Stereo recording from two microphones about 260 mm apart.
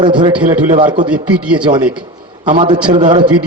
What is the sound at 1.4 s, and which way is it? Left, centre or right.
Speech, centre.